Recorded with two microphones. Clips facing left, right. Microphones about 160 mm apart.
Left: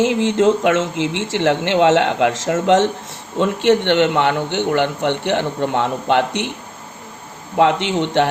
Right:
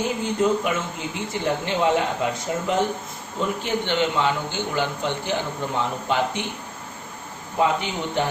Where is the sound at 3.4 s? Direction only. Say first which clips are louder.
Left 10 dB; 75° left (ahead or behind).